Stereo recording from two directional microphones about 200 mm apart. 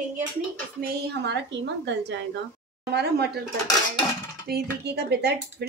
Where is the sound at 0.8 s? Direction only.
55° right (ahead or behind).